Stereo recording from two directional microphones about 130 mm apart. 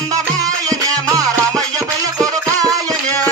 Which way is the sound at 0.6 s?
30° right (ahead or behind).